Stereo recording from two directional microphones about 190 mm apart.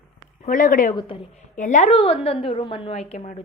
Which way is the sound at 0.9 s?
30° left (ahead or behind).